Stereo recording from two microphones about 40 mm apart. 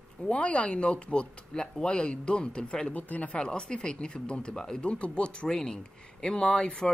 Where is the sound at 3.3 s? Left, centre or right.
Left.